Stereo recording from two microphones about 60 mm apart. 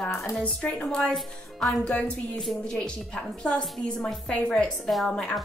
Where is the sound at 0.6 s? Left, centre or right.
Centre.